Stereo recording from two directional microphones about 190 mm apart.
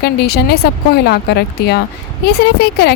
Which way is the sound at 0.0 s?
60° left (ahead or behind).